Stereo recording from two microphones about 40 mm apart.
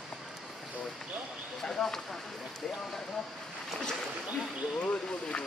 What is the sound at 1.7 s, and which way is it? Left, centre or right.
Speech, centre.